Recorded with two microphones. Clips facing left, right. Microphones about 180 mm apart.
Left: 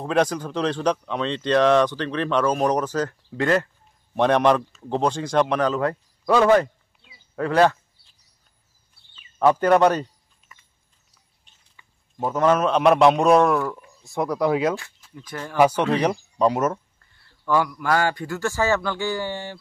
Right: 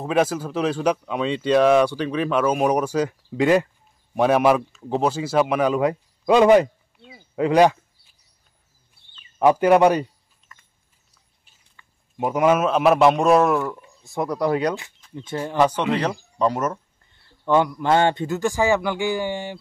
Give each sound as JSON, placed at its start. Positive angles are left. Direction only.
{"t": 0.0, "sound": "speech", "side_deg": -5}
{"t": 7.3, "sound": "a sound", "side_deg": -15}
{"t": 9.4, "sound": "speech", "side_deg": -10}
{"t": 11.8, "sound": "a sound", "side_deg": 15}
{"t": 12.2, "sound": "a man's voice", "side_deg": -10}
{"t": 15.1, "sound": "speech", "side_deg": -25}
{"t": 15.5, "sound": "speech", "side_deg": 10}
{"t": 17.0, "sound": "speech", "side_deg": -20}